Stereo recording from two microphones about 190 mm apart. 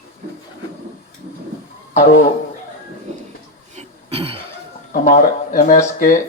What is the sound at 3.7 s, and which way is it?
Cough, 30° right (ahead or behind).